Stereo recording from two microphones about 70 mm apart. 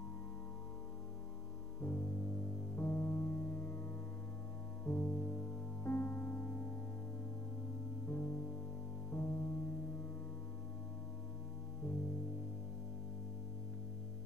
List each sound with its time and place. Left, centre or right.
1.8 s music: left
8.1 s music: left
11.8 s music: left